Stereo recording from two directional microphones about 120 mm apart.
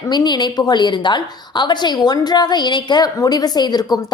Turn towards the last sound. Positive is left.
turn(degrees=35)  # may be behind; listen again after turning